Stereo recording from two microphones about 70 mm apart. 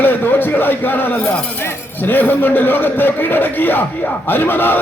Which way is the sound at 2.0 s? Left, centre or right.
Left.